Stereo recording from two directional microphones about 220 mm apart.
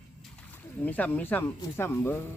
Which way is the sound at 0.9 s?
5° left (ahead or behind).